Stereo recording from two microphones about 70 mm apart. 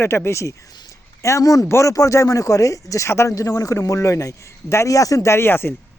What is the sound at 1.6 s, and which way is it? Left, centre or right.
Speech, left.